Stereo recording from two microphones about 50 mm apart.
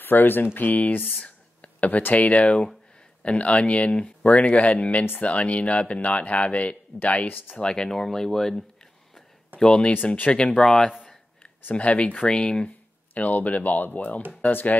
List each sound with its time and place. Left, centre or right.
0.0 s speech: left
7.5 s speech: centre
11.7 s speech: left